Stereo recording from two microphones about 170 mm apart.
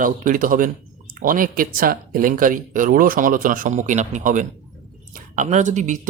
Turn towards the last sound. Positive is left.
turn(degrees=-45)  # may be behind; listen again after turning